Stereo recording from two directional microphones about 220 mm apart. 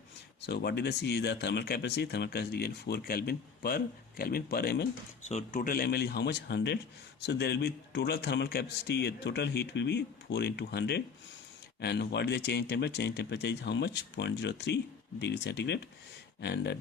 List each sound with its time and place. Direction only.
0.4 s speech: 50° left (ahead or behind)
5.2 s speech: 30° left (ahead or behind); by 16.7 s 50° left (ahead or behind)